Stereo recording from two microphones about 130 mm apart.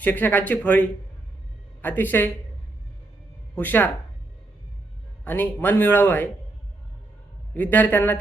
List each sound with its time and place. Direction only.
0.0 s a man's voice: 15° left (ahead or behind)
3.5 s speech: 15° left (ahead or behind)
5.2 s a man's voice: 15° left (ahead or behind)
7.5 s a man's voice: 15° left (ahead or behind)